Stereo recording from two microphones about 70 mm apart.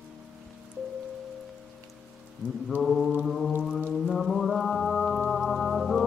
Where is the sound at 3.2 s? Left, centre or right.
Centre.